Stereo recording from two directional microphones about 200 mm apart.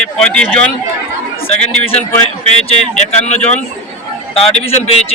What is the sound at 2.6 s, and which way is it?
Speech, 35° left (ahead or behind).